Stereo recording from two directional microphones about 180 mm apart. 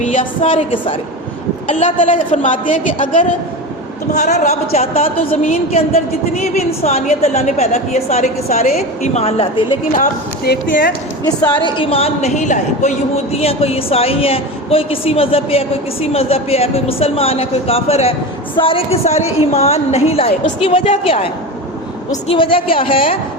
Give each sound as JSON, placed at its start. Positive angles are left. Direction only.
{"t": 0.2, "sound": "a woman's voice", "side_deg": 30}
{"t": 1.7, "sound": "a woman's voice", "side_deg": 45}
{"t": 10.4, "sound": "speech", "side_deg": 60}
{"t": 11.6, "sound": "a woman's voice", "side_deg": 30}